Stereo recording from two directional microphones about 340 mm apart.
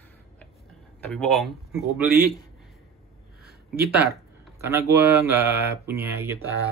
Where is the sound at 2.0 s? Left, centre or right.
Right.